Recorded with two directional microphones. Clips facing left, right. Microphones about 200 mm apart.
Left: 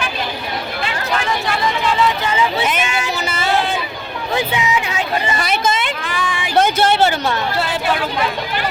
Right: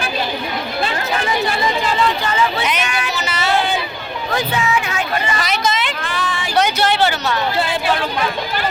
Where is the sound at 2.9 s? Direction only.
25° left (ahead or behind).